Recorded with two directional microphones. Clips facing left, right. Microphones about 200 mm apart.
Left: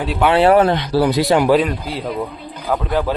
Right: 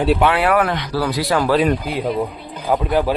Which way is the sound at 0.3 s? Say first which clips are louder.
Left 5 dB; 25° left (ahead or behind).